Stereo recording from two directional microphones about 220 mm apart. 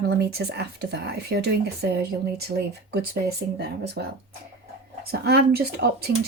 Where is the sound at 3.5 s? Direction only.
50° right (ahead or behind).